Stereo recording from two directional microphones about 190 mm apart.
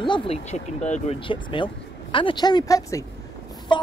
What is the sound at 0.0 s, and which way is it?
A woman's voice, 25° left (ahead or behind).